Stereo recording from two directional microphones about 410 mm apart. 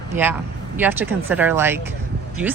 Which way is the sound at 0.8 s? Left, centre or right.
Centre.